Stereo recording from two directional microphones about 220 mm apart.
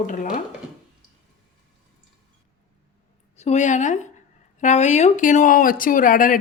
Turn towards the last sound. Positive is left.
turn(degrees=35)  # may be behind; listen again after turning